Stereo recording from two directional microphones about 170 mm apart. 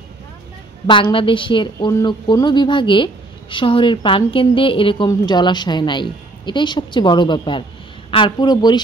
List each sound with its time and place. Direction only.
0.8 s a woman's voice: 30° left (ahead or behind)